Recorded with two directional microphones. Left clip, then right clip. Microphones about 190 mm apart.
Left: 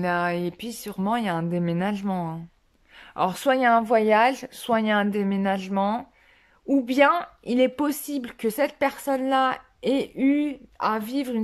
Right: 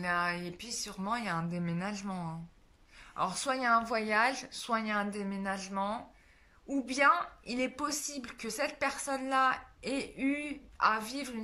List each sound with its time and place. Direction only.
0.0 s a woman's voice: 35° left (ahead or behind)